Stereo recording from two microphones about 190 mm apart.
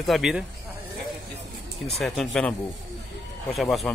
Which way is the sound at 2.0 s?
5° left (ahead or behind).